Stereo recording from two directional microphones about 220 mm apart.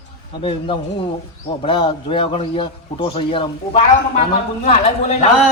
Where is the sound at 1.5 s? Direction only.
25° left (ahead or behind).